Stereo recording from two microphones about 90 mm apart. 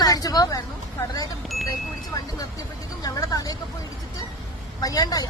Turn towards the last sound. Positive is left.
turn(degrees=45)  # may be behind; listen again after turning